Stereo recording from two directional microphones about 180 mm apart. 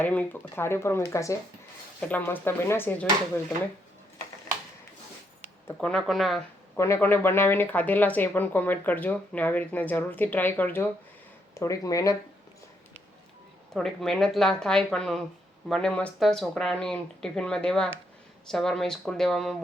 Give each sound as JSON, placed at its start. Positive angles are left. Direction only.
{"t": 0.0, "sound": "speech", "side_deg": 10}
{"t": 5.6, "sound": "speech", "side_deg": 5}
{"t": 6.7, "sound": "speech", "side_deg": 15}
{"t": 13.7, "sound": "speech", "side_deg": 0}